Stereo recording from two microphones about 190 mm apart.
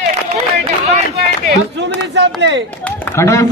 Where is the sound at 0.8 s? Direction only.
35° right (ahead or behind).